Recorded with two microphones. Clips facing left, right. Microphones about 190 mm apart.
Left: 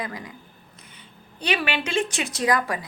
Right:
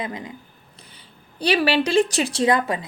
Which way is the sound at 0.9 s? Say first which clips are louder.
Right 6 dB; 35° right (ahead or behind).